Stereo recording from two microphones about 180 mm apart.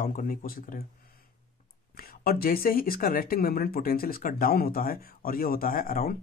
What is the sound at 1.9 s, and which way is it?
Speech, 55° left (ahead or behind).